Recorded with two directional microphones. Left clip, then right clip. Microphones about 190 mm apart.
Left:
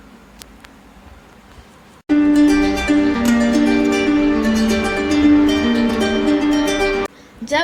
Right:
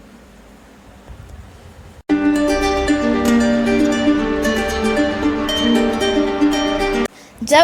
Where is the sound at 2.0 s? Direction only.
Centre (ahead or behind).